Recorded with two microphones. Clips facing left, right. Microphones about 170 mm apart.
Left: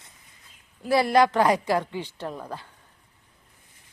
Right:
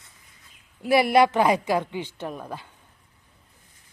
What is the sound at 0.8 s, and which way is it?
Speech, 15° right (ahead or behind).